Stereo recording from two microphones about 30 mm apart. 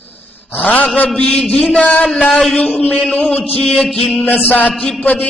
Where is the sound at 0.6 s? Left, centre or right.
Left.